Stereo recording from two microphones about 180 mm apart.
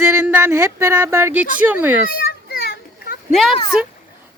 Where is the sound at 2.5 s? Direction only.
55° left (ahead or behind).